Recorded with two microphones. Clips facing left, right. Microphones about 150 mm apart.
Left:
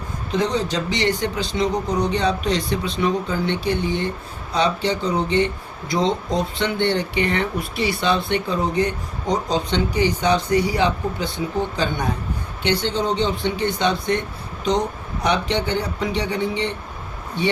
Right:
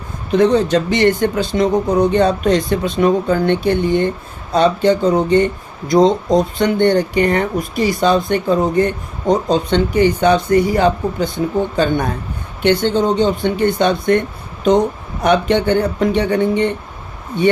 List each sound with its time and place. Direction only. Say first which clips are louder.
0.3 s speech: right 9 dB; 55° right (ahead or behind)
12.6 s speech: right 7 dB; 50° right (ahead or behind)